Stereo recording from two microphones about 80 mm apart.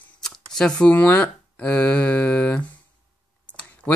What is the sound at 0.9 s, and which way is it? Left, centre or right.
Speech, left.